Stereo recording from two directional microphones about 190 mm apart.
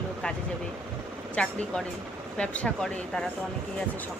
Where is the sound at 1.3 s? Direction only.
5° left (ahead or behind).